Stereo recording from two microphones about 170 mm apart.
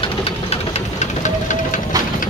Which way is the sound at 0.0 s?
35° left (ahead or behind).